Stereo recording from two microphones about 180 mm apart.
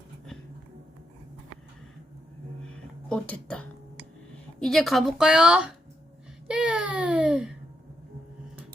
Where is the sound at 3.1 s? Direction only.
5° left (ahead or behind).